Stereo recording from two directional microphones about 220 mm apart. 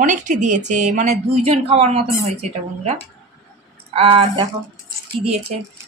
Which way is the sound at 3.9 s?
25° right (ahead or behind).